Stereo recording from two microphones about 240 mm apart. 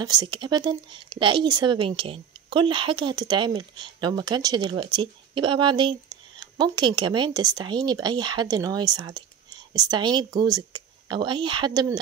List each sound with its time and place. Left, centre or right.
0.0 s speech: centre